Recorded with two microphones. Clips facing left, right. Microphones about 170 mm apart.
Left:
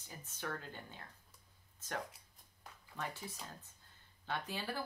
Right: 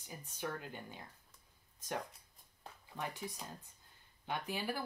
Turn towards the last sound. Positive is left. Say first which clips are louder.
# right 2 dB
turn(degrees=-15)  # may be behind; listen again after turning